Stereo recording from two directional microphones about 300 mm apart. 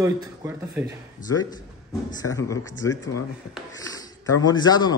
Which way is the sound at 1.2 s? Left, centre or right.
Left.